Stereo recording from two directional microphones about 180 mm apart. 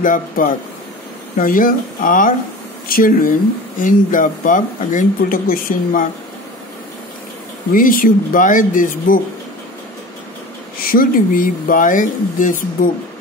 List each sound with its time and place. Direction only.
0.0 s speech: 50° left (ahead or behind)
7.7 s speech: 50° left (ahead or behind)
10.8 s speech: 55° left (ahead or behind)